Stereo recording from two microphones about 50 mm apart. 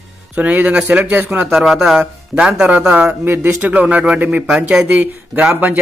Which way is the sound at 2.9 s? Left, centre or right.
Right.